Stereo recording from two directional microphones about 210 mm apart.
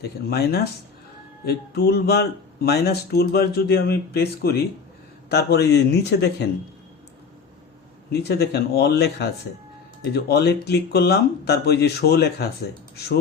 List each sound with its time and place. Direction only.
0.3 s speech: 50° left (ahead or behind)
8.1 s speech: 50° left (ahead or behind)